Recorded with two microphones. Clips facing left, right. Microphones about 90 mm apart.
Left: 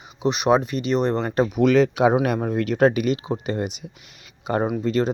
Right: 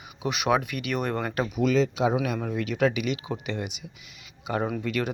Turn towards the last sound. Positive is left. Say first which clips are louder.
# left 7 dB
turn(degrees=30)  # may be behind; listen again after turning